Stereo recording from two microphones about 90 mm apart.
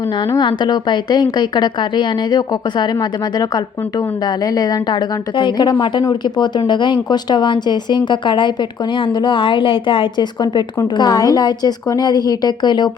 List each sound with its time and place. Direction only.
0.3 s speech: 55° left (ahead or behind); by 10.2 s 70° left (ahead or behind)
10.4 s a woman's voice: 60° left (ahead or behind)